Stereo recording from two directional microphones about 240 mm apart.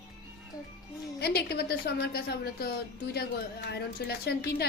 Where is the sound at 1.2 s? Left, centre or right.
Left.